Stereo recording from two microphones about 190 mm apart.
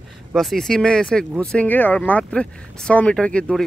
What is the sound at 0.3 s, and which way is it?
Speech, centre (ahead or behind).